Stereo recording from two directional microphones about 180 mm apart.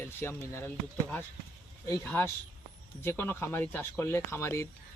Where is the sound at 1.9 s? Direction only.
10° left (ahead or behind).